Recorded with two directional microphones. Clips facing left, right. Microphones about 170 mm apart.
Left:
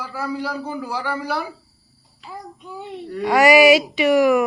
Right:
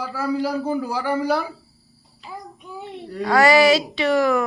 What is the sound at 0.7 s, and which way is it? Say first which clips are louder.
Speech: right 4 dB; 45° right (ahead or behind).